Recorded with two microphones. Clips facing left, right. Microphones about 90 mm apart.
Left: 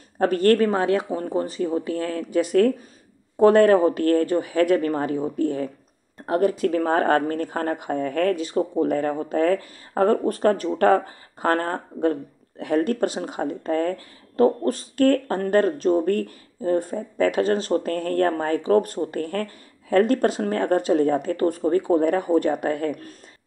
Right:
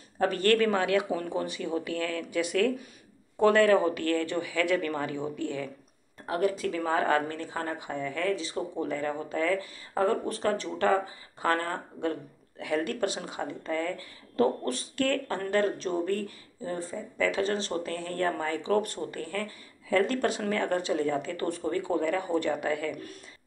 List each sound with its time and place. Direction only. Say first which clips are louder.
0.2 s speech: left 6 dB; 40° left (ahead or behind)